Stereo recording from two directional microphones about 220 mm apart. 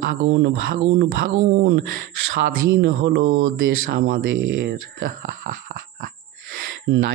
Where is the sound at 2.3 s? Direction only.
50° right (ahead or behind).